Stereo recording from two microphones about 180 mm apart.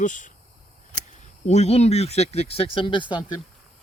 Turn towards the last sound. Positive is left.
turn(degrees=25)  # may be behind; listen again after turning